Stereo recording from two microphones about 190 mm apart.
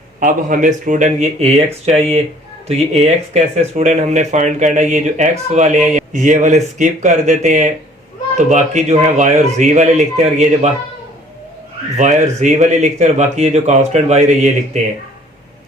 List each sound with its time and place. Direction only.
0.2 s speech: 45° right (ahead or behind)
11.9 s speech: 40° right (ahead or behind)